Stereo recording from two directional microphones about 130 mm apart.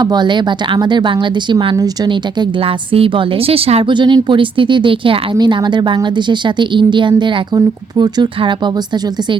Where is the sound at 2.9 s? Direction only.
45° right (ahead or behind).